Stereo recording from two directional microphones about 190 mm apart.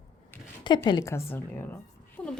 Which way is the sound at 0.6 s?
25° left (ahead or behind).